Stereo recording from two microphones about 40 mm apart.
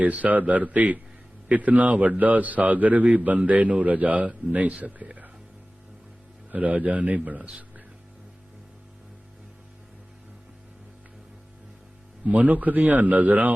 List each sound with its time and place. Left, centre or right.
0.0 s a man's voice: right
6.5 s a man's voice: right
12.2 s a man's voice: right